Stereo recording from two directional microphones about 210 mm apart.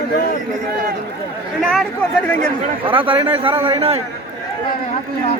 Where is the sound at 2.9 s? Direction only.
25° right (ahead or behind).